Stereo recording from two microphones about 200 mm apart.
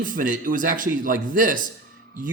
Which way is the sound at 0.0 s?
40° right (ahead or behind).